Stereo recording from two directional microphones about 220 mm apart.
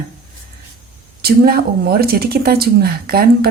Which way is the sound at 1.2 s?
45° right (ahead or behind).